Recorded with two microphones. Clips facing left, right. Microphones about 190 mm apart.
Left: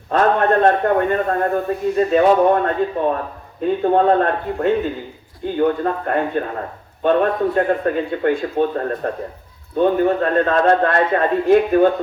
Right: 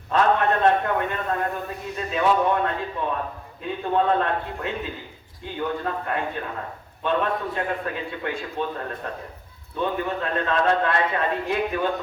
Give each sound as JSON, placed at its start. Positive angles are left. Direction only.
{"t": 0.1, "sound": "a man's voice", "side_deg": 50}